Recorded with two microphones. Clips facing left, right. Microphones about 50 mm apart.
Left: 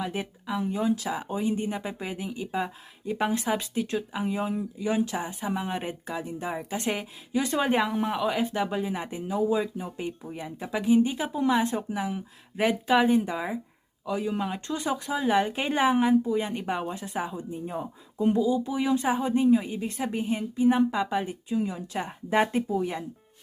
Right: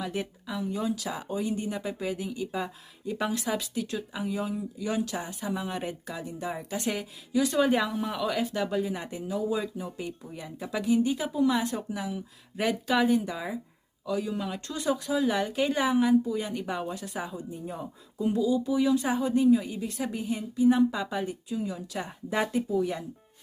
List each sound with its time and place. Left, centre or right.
0.0 s speech: left
7.9 s speech: left
8.1 s speech: left